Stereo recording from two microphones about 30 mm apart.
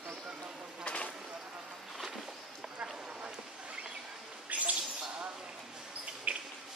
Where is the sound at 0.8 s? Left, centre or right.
Left.